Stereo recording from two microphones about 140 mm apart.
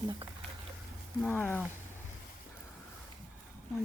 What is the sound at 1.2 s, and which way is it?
Speech, 10° left (ahead or behind).